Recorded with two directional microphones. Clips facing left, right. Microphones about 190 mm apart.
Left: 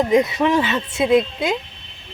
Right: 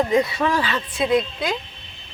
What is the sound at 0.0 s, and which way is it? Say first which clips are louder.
A woman's voice: left 3 dB; 20° left (ahead or behind).